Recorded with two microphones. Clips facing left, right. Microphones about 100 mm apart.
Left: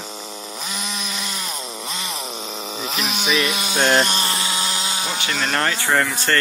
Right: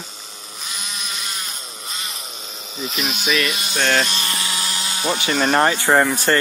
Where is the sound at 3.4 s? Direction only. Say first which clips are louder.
Left 2 dB; 20° left (ahead or behind).